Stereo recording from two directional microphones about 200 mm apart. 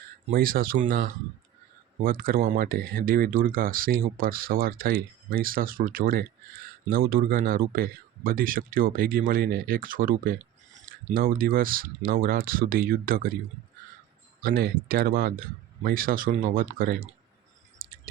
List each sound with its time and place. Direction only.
0.3 s speech: 45° right (ahead or behind)
14.4 s speech: 45° right (ahead or behind)
17.7 s a sound: 45° right (ahead or behind)